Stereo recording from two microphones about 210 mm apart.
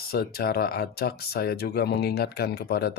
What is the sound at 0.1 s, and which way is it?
Speech, 45° left (ahead or behind).